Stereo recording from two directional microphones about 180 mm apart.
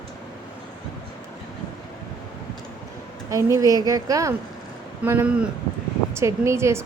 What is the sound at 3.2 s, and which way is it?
A woman's voice, 15° right (ahead or behind).